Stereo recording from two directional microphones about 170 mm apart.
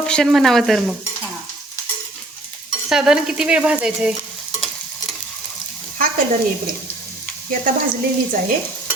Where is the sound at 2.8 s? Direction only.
5° right (ahead or behind).